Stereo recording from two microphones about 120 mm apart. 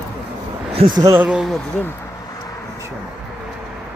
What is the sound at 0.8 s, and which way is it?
Speech, 60° right (ahead or behind).